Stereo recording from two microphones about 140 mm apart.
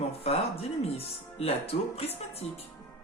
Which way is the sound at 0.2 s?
45° left (ahead or behind).